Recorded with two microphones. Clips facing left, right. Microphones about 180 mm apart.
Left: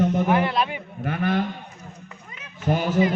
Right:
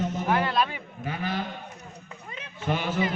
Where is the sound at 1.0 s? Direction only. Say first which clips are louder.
Left 7 dB; 55° left (ahead or behind).